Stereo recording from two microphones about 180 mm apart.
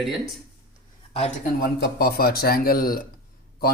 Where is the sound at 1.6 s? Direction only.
55° left (ahead or behind).